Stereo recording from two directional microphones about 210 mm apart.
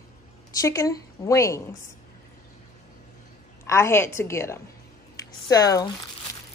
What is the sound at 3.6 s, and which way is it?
Speech, 10° left (ahead or behind).